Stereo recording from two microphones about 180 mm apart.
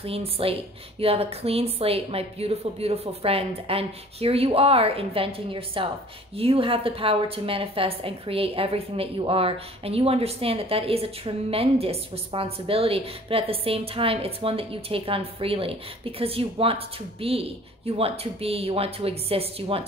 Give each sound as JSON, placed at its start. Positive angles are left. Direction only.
{"t": 0.0, "sound": "a woman's voice", "side_deg": -30}